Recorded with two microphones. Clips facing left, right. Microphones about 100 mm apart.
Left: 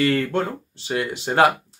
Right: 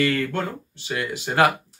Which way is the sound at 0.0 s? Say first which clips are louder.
Left 2 dB; 30° left (ahead or behind).